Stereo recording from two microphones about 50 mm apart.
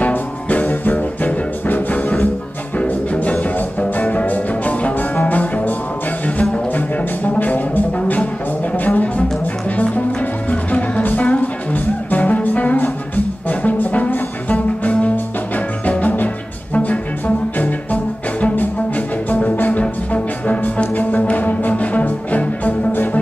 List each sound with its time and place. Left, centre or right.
0.0 s music: left
7.3 s music: left
8.0 s music: left
8.7 s music: left
11.0 s music: left
11.2 s music: left
18.4 s music: left